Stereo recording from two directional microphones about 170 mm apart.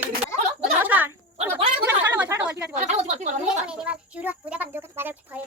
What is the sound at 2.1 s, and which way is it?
Chatter, 10° right (ahead or behind).